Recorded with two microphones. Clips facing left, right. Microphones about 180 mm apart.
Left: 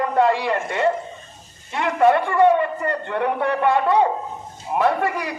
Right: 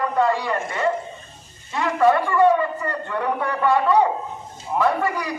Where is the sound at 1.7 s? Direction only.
20° left (ahead or behind).